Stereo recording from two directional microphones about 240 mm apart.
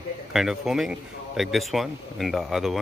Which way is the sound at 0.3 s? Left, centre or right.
Centre.